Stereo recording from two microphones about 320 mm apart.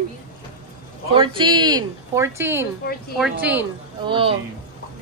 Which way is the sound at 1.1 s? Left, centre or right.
Centre.